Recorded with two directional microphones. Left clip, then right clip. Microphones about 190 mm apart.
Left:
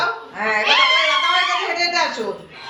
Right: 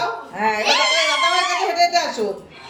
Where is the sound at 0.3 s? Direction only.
75° right (ahead or behind).